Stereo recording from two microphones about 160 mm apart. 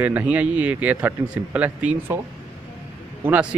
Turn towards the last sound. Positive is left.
turn(degrees=-10)  # may be behind; listen again after turning